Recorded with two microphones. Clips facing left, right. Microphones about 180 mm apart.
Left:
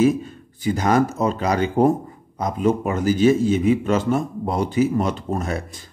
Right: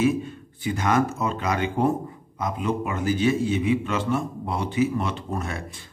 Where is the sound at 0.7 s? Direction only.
35° left (ahead or behind).